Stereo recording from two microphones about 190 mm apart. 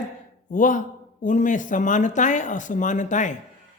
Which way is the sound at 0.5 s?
45° left (ahead or behind).